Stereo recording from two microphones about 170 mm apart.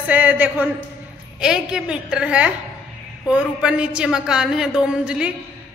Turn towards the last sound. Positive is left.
turn(degrees=-5)  # may be behind; listen again after turning